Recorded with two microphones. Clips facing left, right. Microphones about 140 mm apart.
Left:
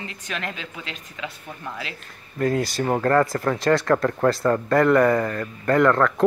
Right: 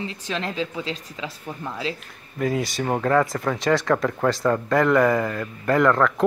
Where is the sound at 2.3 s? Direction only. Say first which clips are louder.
Left 2 dB; centre (ahead or behind).